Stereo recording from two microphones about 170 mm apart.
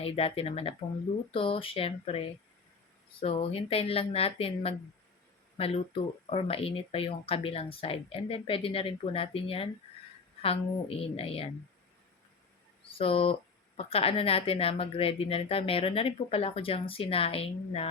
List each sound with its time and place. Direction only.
0.0 s speech: 35° left (ahead or behind)
12.9 s speech: 35° left (ahead or behind)